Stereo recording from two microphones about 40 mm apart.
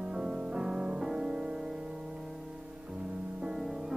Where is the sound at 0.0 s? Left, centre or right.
Centre.